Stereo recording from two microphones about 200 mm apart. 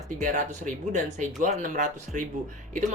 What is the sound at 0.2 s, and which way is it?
Speech, 40° right (ahead or behind).